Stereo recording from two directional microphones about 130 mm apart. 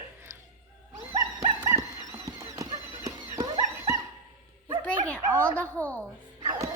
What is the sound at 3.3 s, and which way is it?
Horse, 25° right (ahead or behind).